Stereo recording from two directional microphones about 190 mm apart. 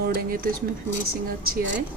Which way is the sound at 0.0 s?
50° right (ahead or behind).